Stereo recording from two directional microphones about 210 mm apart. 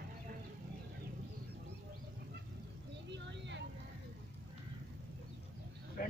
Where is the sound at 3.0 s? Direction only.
55° right (ahead or behind).